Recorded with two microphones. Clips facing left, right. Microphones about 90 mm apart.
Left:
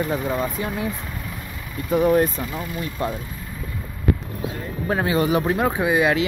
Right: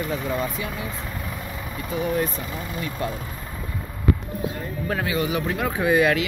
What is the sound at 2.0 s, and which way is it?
Speech, 45° left (ahead or behind).